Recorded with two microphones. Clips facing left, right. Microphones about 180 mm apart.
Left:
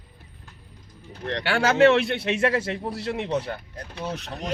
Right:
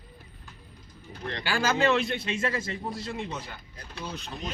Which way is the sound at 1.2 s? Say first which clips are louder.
Left 5 dB; 70° left (ahead or behind).